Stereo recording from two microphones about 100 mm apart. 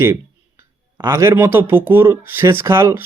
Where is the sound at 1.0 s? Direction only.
30° right (ahead or behind).